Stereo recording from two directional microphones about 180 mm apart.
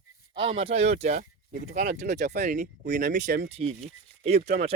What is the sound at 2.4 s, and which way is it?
Speech, 45° right (ahead or behind).